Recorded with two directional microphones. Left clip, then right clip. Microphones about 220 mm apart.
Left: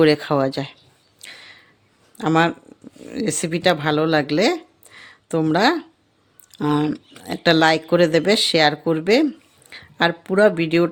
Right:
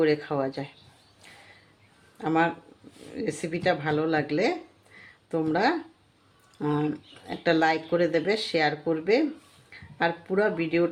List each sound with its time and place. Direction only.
0.0 s speech: 55° left (ahead or behind)
2.1 s speech: 50° left (ahead or behind)